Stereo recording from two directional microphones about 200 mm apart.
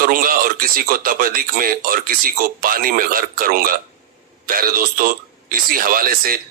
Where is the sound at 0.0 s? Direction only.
45° right (ahead or behind).